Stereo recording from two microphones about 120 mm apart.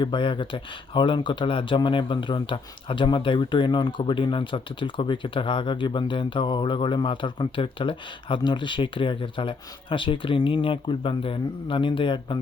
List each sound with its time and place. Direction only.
0.0 s speech: 40° left (ahead or behind)